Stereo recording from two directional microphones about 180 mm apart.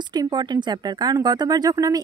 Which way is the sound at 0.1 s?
25° right (ahead or behind).